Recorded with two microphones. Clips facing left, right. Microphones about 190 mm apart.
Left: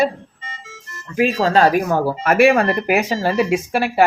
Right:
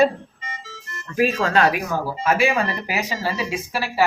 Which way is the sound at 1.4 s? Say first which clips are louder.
Left 4 dB; 35° left (ahead or behind).